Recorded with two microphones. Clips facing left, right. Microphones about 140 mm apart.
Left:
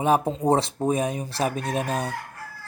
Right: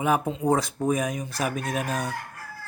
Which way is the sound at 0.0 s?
30° left (ahead or behind).